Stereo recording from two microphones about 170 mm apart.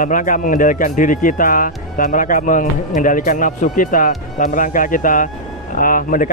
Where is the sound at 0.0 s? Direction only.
50° left (ahead or behind).